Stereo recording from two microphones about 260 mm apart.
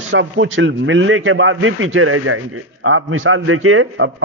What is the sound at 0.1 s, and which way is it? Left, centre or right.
A man's voice, right.